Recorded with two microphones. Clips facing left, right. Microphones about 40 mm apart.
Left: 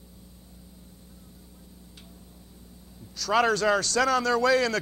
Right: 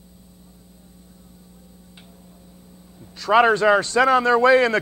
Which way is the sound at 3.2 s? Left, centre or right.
Right.